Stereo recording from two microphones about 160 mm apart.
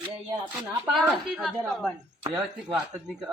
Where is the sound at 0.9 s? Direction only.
5° right (ahead or behind).